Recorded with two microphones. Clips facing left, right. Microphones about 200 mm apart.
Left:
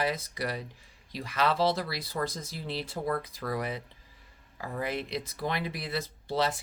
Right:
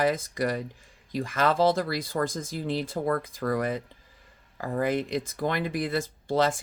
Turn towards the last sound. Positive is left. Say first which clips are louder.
# right 5 dB
turn(degrees=-50)  # may be behind; listen again after turning